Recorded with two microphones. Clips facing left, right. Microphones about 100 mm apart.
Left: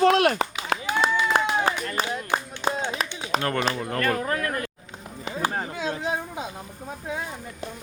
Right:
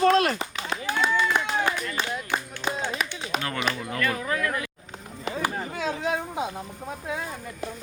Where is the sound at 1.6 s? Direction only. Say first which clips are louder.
Left 2 dB; 35° left (ahead or behind).